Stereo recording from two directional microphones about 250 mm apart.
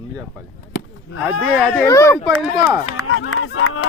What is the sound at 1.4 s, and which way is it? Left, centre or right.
Speech, centre.